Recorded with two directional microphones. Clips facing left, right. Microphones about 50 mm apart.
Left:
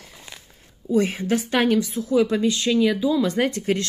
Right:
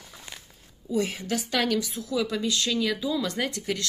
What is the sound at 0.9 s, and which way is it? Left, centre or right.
A woman's voice, left.